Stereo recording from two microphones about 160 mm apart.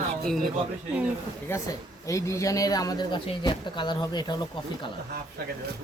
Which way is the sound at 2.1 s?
20° left (ahead or behind).